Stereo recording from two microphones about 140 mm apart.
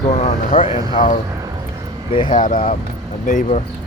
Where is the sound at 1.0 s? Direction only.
70° left (ahead or behind).